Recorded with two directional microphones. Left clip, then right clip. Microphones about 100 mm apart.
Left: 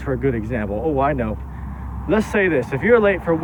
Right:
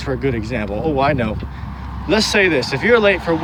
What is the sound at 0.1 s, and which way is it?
Speech, 35° right (ahead or behind).